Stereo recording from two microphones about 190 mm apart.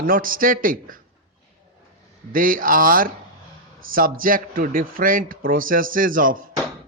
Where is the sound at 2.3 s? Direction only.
45° right (ahead or behind).